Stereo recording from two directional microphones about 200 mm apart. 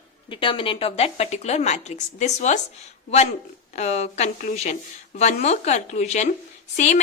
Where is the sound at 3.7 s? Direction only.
35° left (ahead or behind).